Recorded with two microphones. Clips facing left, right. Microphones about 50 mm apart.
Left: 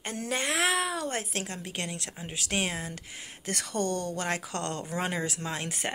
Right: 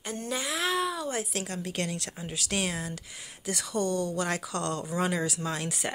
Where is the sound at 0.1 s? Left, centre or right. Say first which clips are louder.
Left 2 dB; left.